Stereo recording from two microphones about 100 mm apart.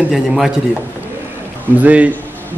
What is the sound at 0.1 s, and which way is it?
Speech, 5° right (ahead or behind).